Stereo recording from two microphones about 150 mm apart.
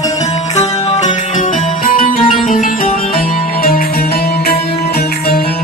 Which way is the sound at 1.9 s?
70° left (ahead or behind).